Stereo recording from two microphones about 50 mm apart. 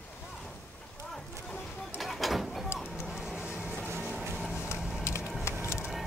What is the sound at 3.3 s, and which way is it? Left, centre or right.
Music, right.